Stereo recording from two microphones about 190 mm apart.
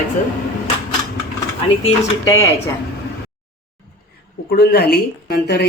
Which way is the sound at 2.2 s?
15° left (ahead or behind).